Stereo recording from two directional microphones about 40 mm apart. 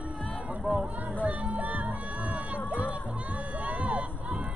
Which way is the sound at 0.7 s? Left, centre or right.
Right.